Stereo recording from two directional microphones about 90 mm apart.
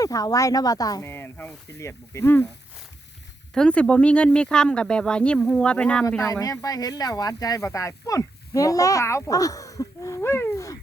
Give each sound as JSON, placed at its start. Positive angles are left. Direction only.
{"t": 0.0, "sound": "speech", "side_deg": 40}
{"t": 1.0, "sound": "speech", "side_deg": 25}
{"t": 3.5, "sound": "speech", "side_deg": 10}
{"t": 6.2, "sound": "speech", "side_deg": 40}
{"t": 10.2, "sound": "a sound", "side_deg": 30}